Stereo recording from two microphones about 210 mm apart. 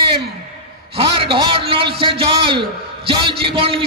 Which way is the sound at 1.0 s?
25° right (ahead or behind).